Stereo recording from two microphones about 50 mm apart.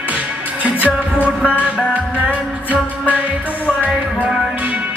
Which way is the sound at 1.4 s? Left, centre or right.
Left.